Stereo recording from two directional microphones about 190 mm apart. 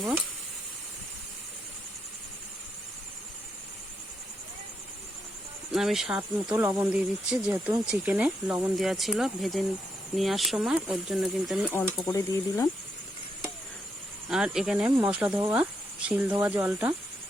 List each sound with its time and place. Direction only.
5.7 s speech: centre (ahead or behind)
11.7 s speech: 15° left (ahead or behind)
14.3 s speech: centre (ahead or behind)